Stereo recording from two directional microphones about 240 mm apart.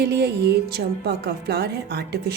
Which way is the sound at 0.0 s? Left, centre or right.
Right.